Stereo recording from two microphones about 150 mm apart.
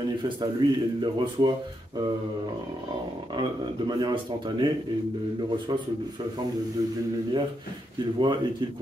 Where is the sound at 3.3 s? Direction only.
30° right (ahead or behind).